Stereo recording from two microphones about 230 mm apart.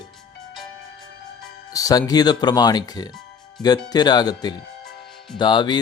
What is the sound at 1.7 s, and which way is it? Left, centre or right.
Speech, centre.